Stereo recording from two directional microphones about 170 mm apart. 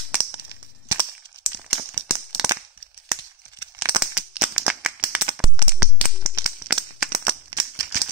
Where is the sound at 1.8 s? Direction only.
30° right (ahead or behind).